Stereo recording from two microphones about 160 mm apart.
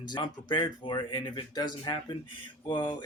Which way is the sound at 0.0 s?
25° left (ahead or behind).